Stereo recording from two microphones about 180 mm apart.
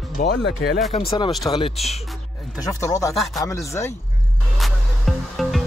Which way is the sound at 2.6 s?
20° left (ahead or behind).